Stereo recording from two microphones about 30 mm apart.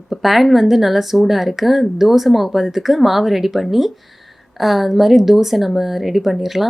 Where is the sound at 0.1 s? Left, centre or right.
Centre.